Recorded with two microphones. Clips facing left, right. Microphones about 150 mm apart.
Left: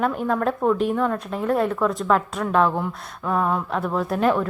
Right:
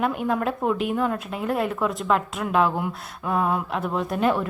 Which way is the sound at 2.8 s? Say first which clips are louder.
Left 1 dB; 20° right (ahead or behind).